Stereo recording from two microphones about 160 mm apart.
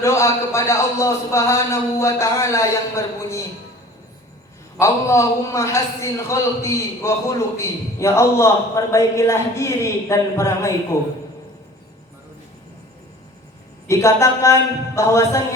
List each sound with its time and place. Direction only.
0.0 s a man's voice: 15° left (ahead or behind)
4.8 s a man's voice: 20° left (ahead or behind)
13.8 s a man's voice: 20° left (ahead or behind)